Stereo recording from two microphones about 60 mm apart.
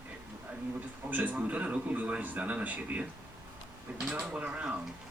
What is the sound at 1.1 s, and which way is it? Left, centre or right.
Speech, right.